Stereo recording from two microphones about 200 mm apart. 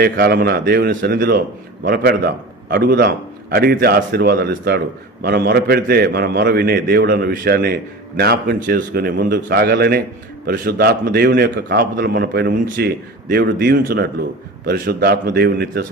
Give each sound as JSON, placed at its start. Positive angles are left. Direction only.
{"t": 0.0, "sound": "a man's voice", "side_deg": -50}